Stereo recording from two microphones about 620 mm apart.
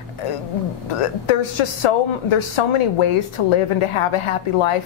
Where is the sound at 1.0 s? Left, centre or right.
Left.